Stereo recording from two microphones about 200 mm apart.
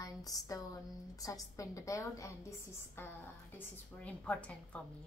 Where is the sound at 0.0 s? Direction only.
20° left (ahead or behind).